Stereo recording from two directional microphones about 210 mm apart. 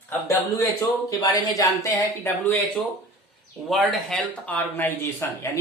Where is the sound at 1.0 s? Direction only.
15° left (ahead or behind).